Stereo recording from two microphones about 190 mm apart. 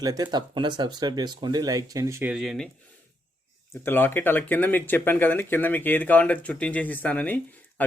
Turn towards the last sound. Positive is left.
turn(degrees=10)  # may be behind; listen again after turning